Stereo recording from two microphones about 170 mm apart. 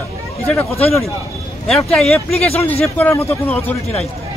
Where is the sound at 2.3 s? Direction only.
35° left (ahead or behind).